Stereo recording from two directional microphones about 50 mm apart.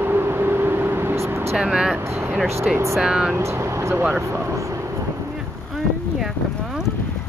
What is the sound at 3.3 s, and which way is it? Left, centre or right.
Speech, right.